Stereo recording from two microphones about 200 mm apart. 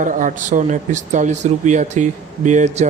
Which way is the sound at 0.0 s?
40° right (ahead or behind).